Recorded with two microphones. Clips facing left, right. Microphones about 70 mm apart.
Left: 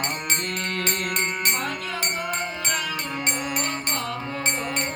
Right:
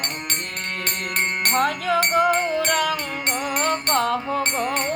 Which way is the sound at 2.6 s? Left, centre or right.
Right.